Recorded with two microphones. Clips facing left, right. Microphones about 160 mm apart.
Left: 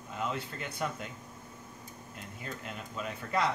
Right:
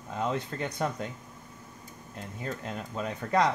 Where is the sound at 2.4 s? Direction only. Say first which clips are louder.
Right 6 dB; 35° right (ahead or behind).